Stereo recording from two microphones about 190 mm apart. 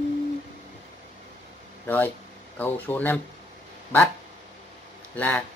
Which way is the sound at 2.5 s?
10° left (ahead or behind).